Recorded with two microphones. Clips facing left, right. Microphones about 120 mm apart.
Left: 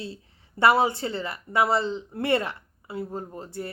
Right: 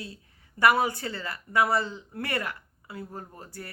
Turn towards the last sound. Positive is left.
turn(degrees=25)  # may be behind; listen again after turning